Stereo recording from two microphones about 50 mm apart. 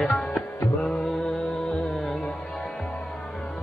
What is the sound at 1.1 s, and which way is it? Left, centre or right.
Music, centre.